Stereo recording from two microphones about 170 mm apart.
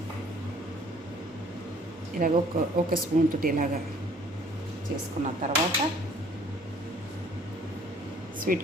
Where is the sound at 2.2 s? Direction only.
50° right (ahead or behind).